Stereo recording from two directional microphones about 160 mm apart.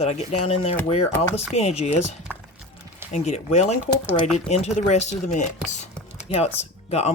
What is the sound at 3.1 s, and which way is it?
Speech, 45° left (ahead or behind).